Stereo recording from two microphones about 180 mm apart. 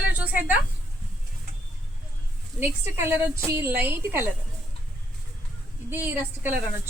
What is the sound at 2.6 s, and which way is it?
A woman's voice, 10° right (ahead or behind).